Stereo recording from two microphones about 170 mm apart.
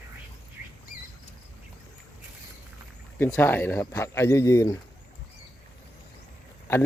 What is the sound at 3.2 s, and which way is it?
Speech, 15° left (ahead or behind).